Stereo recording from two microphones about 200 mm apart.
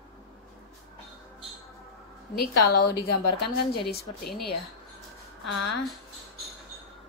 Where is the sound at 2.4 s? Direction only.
55° left (ahead or behind).